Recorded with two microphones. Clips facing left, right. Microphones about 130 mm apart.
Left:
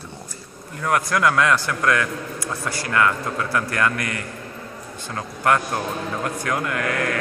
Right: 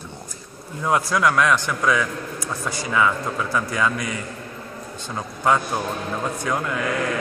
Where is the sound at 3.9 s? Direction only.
90° left.